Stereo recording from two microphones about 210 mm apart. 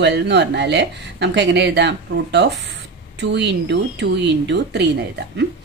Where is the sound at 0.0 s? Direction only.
55° right (ahead or behind).